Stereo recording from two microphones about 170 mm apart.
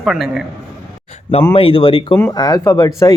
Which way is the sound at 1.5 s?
30° left (ahead or behind).